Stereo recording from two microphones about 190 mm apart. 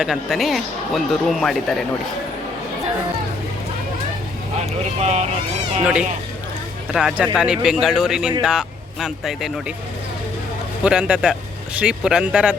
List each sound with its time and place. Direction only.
0.0 s speech: centre (ahead or behind)
4.9 s speech: 35° right (ahead or behind)
5.8 s speech: 5° right (ahead or behind)
10.8 s speech: 5° right (ahead or behind)